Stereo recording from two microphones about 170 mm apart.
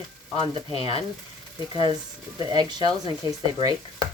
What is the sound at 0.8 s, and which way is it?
Speech, 35° left (ahead or behind).